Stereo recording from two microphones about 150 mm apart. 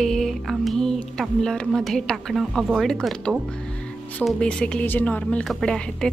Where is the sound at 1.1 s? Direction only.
5° left (ahead or behind).